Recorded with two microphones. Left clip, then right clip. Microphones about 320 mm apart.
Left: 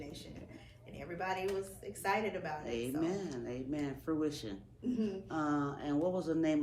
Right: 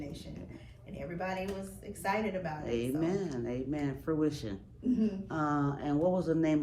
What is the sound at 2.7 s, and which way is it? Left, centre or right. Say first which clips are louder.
Speech: right 5 dB; right.